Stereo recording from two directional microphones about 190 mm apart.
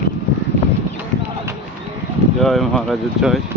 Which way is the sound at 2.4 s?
Centre (ahead or behind).